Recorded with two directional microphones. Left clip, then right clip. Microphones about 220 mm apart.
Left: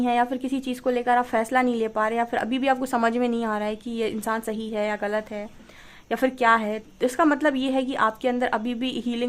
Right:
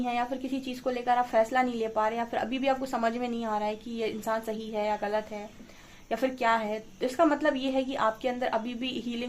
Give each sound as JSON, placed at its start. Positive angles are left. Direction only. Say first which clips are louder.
{"t": 0.0, "sound": "a woman's voice", "louder": "left 7 dB", "side_deg": 40}